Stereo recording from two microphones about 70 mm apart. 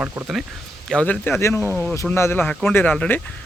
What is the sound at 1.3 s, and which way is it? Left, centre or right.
Speech, left.